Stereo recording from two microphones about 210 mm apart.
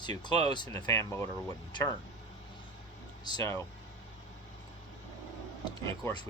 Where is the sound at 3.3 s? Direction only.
15° left (ahead or behind).